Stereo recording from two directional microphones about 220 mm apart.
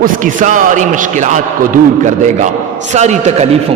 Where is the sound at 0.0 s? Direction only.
35° right (ahead or behind).